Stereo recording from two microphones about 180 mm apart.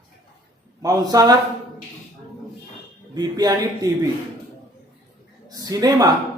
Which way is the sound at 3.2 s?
20° right (ahead or behind).